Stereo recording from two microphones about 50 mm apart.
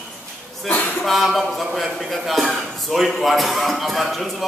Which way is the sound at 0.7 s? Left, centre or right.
Left.